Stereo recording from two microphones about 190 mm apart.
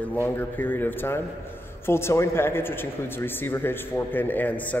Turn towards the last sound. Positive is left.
turn(degrees=10)  # may be behind; listen again after turning